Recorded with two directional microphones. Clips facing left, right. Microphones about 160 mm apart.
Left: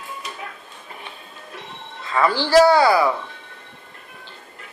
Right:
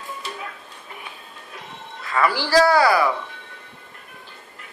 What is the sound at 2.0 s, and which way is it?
Speech, 25° left (ahead or behind).